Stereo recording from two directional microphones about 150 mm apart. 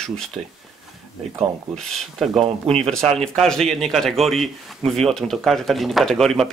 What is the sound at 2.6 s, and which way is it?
Speech, 40° right (ahead or behind).